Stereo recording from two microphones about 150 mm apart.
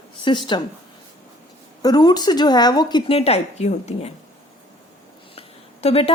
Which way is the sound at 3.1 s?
40° left (ahead or behind).